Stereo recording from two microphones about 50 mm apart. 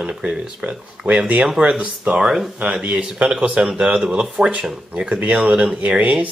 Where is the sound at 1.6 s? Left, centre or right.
Right.